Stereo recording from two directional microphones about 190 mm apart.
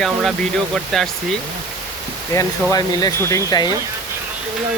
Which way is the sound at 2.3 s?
20° left (ahead or behind).